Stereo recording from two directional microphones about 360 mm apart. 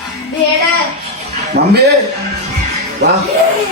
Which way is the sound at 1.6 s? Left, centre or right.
Right.